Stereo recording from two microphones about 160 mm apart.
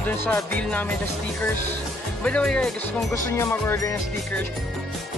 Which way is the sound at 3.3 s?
15° left (ahead or behind).